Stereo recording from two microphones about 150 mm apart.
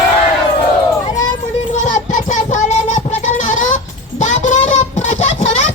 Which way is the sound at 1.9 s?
55° left (ahead or behind).